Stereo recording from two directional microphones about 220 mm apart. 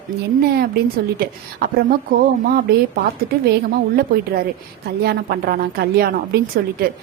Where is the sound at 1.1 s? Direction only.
45° right (ahead or behind).